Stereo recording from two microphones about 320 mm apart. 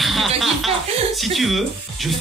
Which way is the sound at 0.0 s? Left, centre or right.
Centre.